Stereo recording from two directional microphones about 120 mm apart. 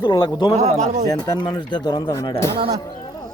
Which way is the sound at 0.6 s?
75° right (ahead or behind).